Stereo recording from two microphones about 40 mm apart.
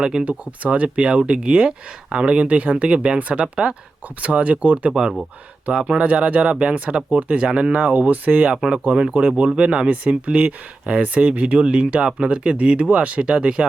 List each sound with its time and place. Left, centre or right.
0.3 s speech: right
4.2 s speech: right
4.9 s speech: centre
7.8 s speech: right
8.4 s speech: right